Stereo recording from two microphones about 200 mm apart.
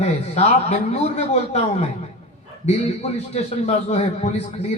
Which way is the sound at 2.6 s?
30° left (ahead or behind).